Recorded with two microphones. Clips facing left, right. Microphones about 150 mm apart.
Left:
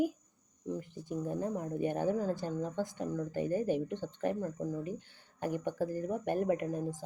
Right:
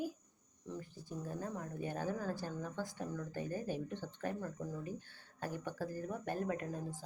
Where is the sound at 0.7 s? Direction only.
20° left (ahead or behind).